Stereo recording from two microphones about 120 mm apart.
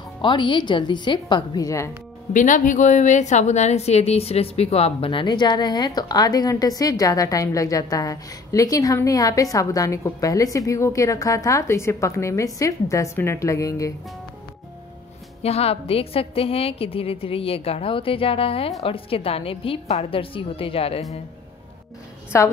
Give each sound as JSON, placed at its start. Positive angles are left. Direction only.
{"t": 0.2, "sound": "a woman's voice", "side_deg": 40}
{"t": 2.3, "sound": "a woman's voice", "side_deg": 90}
{"t": 15.4, "sound": "a woman's voice", "side_deg": 60}
{"t": 22.3, "sound": "a woman's voice", "side_deg": 25}